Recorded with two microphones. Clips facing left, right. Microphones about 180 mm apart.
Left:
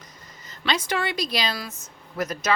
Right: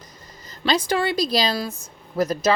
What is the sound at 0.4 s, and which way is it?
A woman's voice, 35° right (ahead or behind).